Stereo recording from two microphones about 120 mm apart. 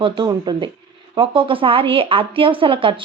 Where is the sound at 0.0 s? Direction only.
35° right (ahead or behind).